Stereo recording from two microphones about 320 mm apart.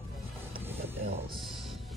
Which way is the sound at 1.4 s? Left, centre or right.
Centre.